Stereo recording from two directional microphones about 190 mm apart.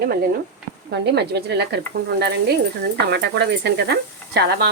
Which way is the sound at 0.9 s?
60° right (ahead or behind).